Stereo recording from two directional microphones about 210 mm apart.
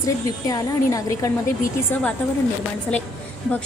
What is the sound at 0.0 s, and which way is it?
A woman's voice, 15° left (ahead or behind).